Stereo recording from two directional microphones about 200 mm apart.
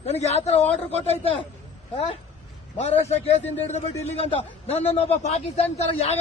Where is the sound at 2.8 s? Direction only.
30° left (ahead or behind).